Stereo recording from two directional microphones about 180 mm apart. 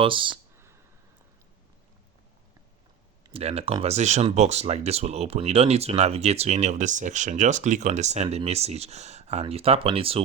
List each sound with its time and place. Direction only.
0.0 s speech: 30° right (ahead or behind)
0.5 s a sound: 15° right (ahead or behind)
3.2 s speech: 35° right (ahead or behind)